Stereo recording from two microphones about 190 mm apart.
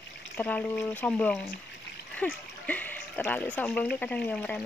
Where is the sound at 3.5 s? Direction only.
5° left (ahead or behind).